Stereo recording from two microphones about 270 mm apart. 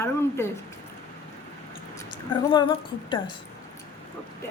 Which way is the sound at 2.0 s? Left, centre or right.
Centre.